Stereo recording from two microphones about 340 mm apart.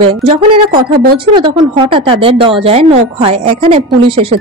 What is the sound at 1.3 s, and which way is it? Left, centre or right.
Speech, centre.